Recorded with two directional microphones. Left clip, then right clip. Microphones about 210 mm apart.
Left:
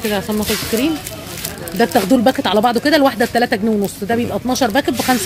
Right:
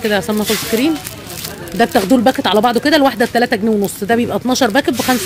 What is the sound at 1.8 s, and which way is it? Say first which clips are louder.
Speech: right 1 dB; 10° right (ahead or behind).